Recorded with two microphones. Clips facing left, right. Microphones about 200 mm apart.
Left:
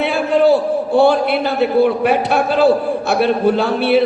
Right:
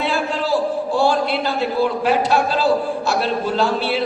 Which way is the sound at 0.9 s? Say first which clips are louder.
Left 6 dB; 60° left (ahead or behind).